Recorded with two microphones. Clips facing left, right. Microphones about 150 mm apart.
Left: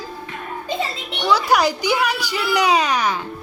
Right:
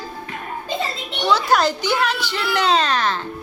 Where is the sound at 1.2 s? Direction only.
5° left (ahead or behind).